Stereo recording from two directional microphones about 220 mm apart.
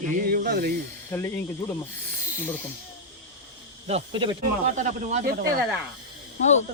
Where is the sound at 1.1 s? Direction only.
10° left (ahead or behind).